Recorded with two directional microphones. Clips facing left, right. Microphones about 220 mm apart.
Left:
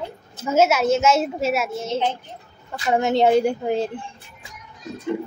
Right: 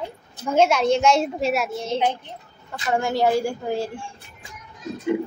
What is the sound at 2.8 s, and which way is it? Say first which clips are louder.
A woman's voice: left 3 dB; 20° left (ahead or behind).